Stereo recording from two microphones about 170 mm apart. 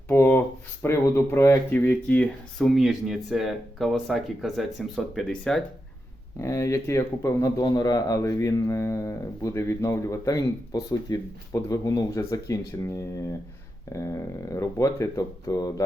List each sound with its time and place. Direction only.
0.1 s speech: 10° left (ahead or behind)
6.4 s speech: 20° left (ahead or behind)
13.9 s speech: 15° left (ahead or behind)